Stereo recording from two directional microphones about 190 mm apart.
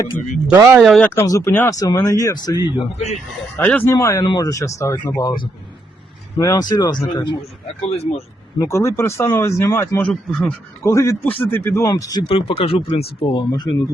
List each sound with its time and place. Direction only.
0.4 s speech: 10° right (ahead or behind)
0.9 s speech: 5° left (ahead or behind)
1.1 s speech: 15° left (ahead or behind)
2.6 s speech: 30° left (ahead or behind)
3.6 s speech: 10° left (ahead or behind)
7.9 s speech: 30° left (ahead or behind)
8.5 s speech: 15° left (ahead or behind)
10.8 s speech: 15° left (ahead or behind)